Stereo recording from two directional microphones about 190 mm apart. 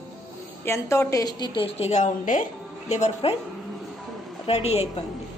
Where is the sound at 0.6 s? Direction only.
15° left (ahead or behind); by 3.4 s 35° left (ahead or behind).